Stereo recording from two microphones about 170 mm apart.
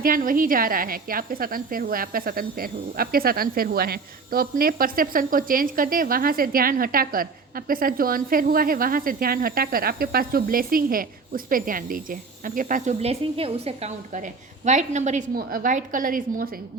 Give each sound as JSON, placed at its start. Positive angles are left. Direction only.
{"t": 0.0, "sound": "a woman's voice", "side_deg": -55}
{"t": 15.4, "sound": "a woman's voice", "side_deg": -60}